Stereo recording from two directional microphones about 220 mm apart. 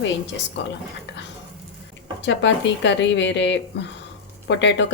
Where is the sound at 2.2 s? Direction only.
55° left (ahead or behind).